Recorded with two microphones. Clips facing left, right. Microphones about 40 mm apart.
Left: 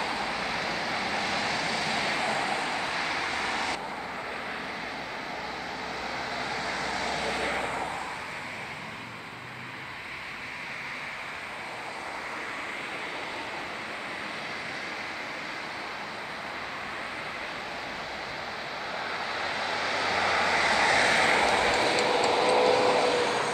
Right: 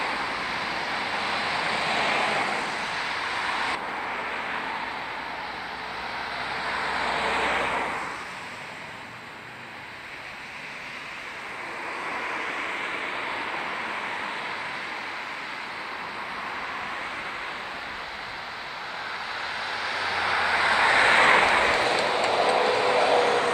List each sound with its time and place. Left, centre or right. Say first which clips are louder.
0.0 s vehicle: right 2 dB; centre; by 2.4 s right
2.4 s vehicle: right 2 dB; centre
4.1 s vehicle: right 5 dB; right
6.0 s vehicle: right 2 dB; centre; by 7.6 s right
7.6 s a sound: right 5 dB; right
13.0 s vehicle: right 5 dB; right
19.0 s vehicle: even; centre; by 23.3 s right